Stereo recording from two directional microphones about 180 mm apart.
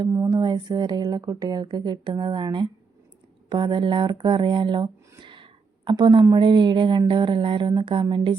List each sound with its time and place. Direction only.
0.1 s speech: 20° right (ahead or behind)